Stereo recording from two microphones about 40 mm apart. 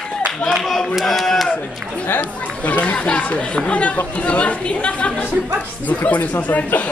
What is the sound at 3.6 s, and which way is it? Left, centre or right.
Speech, left.